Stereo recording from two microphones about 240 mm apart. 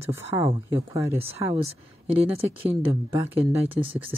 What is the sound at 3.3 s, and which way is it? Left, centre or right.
Speech, right.